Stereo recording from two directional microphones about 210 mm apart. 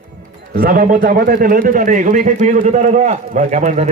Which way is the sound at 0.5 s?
45° right (ahead or behind).